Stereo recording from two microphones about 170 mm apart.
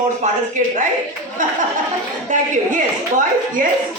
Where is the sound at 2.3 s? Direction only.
50° right (ahead or behind).